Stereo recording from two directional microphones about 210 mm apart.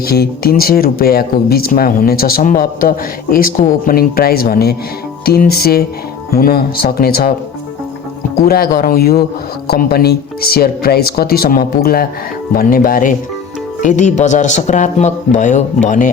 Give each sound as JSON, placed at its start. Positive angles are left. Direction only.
{"t": 0.0, "sound": "speech", "side_deg": 45}
{"t": 8.4, "sound": "a man's voice", "side_deg": 45}